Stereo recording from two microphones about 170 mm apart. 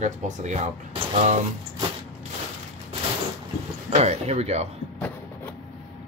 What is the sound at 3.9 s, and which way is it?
Speech, 40° right (ahead or behind).